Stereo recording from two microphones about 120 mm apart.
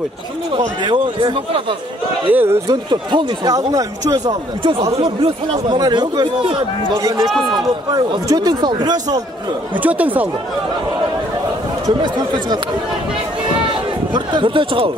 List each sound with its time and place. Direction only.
0.5 s speech: 40° right (ahead or behind)
2.3 s a man's voice: 20° right (ahead or behind)
2.7 s speech: 40° right (ahead or behind)
4.3 s speech: 45° right (ahead or behind)
7.0 s a man's voice: 30° right (ahead or behind)
9.8 s speech: 15° right (ahead or behind)
11.8 s speech: 35° right (ahead or behind)
13.7 s a sound: 40° right (ahead or behind)